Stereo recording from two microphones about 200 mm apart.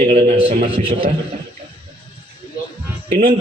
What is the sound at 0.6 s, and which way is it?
Speech, 30° right (ahead or behind).